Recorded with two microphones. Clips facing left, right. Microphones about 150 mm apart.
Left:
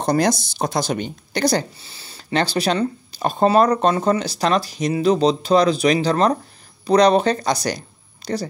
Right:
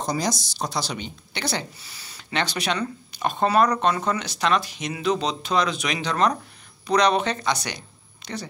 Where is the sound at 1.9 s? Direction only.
30° left (ahead or behind).